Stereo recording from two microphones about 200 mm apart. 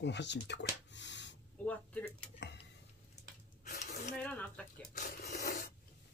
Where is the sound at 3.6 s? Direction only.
40° left (ahead or behind).